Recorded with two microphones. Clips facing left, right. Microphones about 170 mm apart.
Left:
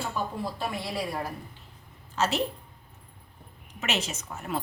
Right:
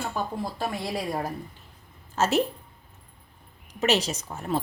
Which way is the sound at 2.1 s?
45° right (ahead or behind).